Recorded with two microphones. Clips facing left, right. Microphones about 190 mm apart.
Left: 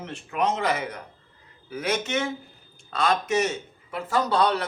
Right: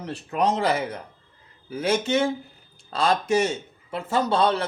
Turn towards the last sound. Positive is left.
turn(degrees=-25)  # may be behind; listen again after turning